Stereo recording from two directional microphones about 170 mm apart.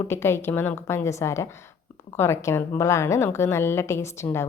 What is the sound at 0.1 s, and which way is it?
A woman's voice, 15° left (ahead or behind).